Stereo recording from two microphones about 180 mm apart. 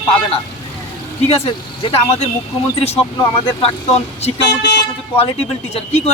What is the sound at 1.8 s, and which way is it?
Speech, 35° left (ahead or behind).